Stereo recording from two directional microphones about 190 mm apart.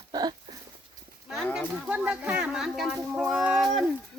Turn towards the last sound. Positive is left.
turn(degrees=0)  # may be behind; listen again after turning